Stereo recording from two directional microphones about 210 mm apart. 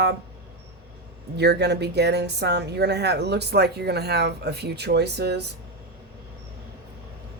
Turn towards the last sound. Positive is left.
turn(degrees=-50)  # may be behind; listen again after turning